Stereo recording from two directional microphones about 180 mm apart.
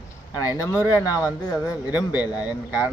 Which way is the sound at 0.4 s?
20° left (ahead or behind).